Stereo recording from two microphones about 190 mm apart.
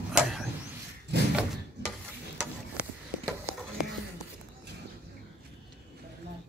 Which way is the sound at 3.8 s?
5° right (ahead or behind).